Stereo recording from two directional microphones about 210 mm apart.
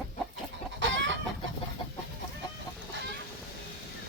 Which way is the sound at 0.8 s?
60° right (ahead or behind).